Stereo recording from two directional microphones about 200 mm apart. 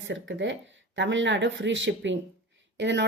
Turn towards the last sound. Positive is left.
turn(degrees=-60)  # may be behind; listen again after turning